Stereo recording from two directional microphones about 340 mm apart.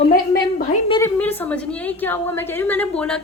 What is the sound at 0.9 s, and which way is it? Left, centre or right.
A woman's voice, centre.